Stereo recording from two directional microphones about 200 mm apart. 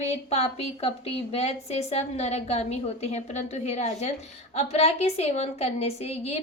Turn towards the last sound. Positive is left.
turn(degrees=30)  # may be behind; listen again after turning